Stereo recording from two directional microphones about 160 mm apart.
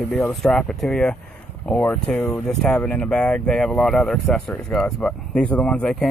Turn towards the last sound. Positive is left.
turn(degrees=5)  # may be behind; listen again after turning